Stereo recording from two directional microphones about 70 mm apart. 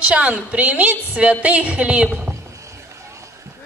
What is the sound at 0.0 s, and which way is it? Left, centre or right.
A woman's voice, centre.